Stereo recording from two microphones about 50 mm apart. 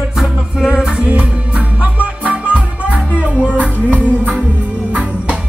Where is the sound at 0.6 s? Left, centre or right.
Centre.